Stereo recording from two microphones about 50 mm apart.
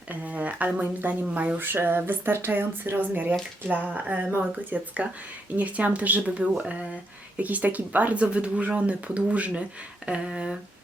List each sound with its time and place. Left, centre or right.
0.1 s speech: right
3.0 s speech: right; by 10.6 s centre